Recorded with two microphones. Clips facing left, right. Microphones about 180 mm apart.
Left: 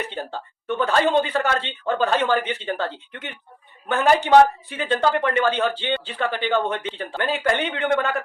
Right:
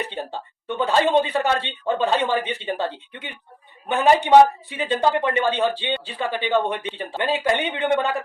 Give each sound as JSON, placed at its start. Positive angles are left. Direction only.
{"t": 0.1, "sound": "speech", "side_deg": -15}